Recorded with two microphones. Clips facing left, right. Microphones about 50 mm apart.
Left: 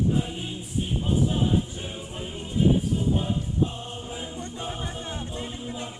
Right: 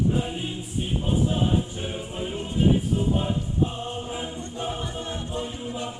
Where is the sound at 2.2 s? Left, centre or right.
Right.